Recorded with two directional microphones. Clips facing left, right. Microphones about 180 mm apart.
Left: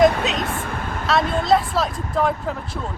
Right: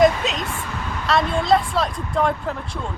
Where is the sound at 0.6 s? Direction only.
50° left (ahead or behind).